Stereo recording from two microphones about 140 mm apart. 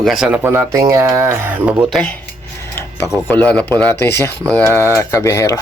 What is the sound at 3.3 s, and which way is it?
Speech, 10° left (ahead or behind).